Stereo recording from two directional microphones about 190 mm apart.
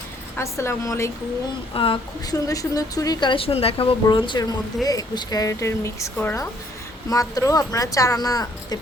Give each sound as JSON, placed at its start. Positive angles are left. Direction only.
{"t": 0.3, "sound": "a woman's voice", "side_deg": 15}
{"t": 1.7, "sound": "a woman's voice", "side_deg": 25}